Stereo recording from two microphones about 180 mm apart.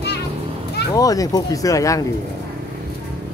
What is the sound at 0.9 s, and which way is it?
Speech, 20° left (ahead or behind).